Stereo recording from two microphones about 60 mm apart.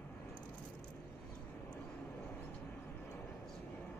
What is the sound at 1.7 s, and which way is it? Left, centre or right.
Vehicle, left.